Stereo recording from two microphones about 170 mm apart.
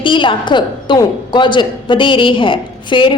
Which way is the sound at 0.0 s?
30° left (ahead or behind).